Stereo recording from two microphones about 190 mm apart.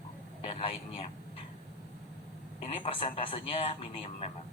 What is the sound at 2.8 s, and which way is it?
Speech, 35° left (ahead or behind).